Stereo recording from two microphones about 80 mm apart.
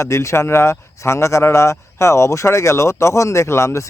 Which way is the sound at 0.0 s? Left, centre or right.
Left.